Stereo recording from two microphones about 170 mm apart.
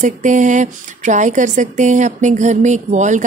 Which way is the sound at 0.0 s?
45° right (ahead or behind).